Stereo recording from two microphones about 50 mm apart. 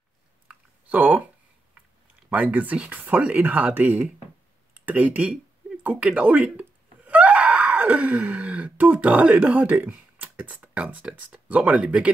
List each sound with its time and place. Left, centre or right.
0.5 s a sound: right
2.2 s speech: right
7.1 s wail: right
8.7 s speech: right